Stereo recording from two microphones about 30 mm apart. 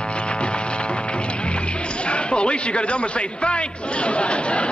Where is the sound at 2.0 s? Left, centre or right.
Left.